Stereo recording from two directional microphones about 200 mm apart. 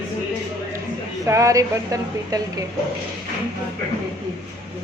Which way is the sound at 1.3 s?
15° right (ahead or behind).